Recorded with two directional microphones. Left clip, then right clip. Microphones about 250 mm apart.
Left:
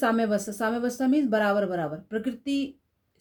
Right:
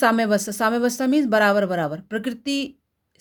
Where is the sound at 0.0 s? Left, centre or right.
Right.